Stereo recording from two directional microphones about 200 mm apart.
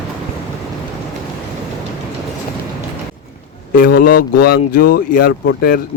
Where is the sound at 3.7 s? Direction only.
45° left (ahead or behind).